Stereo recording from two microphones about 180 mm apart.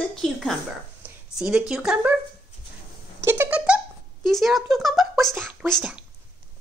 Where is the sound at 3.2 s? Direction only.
10° right (ahead or behind).